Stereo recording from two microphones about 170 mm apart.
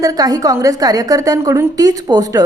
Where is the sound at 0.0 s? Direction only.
20° right (ahead or behind).